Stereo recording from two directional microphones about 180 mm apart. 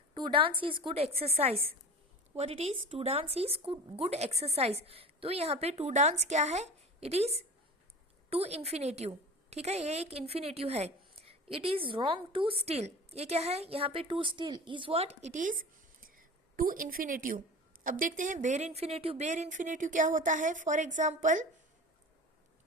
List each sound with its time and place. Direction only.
0.1 s a woman's voice: 30° right (ahead or behind)